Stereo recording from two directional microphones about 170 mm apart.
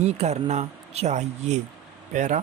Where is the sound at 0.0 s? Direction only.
40° right (ahead or behind).